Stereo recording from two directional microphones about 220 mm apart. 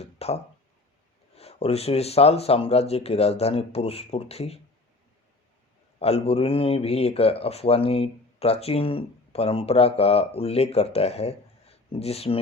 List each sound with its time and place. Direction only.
0.0 s speech: 30° left (ahead or behind)
1.4 s speech: 25° left (ahead or behind)
6.0 s speech: 30° left (ahead or behind)